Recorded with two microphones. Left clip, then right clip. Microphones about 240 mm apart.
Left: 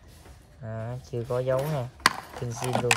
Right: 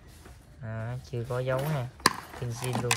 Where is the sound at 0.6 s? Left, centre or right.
Centre.